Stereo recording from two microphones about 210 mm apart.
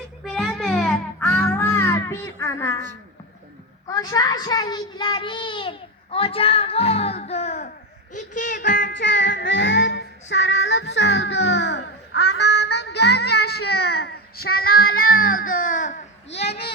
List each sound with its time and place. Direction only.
0.3 s music: centre (ahead or behind)
3.8 s a child's voice: 15° left (ahead or behind); by 7.7 s 35° left (ahead or behind)
8.1 s a sound: 35° left (ahead or behind)
8.9 s child singing: 60° left (ahead or behind)
13.7 s speech: 50° left (ahead or behind)
14.3 s child singing: 90° left
15.7 s a sound: 35° left (ahead or behind)
16.3 s speech: 55° left (ahead or behind)